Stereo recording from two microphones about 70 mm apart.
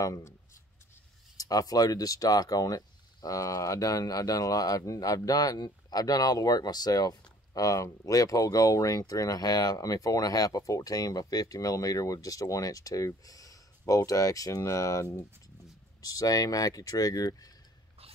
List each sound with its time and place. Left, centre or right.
1.3 s speech: left
16.0 s speech: left